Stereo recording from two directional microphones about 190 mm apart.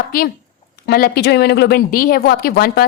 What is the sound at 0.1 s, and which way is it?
Speech, 50° left (ahead or behind).